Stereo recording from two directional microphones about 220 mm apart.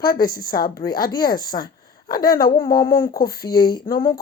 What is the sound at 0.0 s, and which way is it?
Speech, 45° left (ahead or behind).